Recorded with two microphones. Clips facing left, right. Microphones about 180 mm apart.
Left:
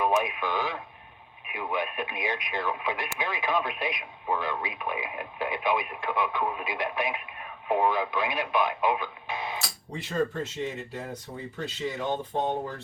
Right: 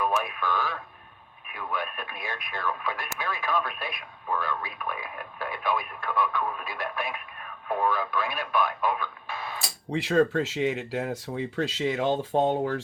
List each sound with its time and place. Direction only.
0.0 s speech: 20° left (ahead or behind)
9.9 s speech: 90° right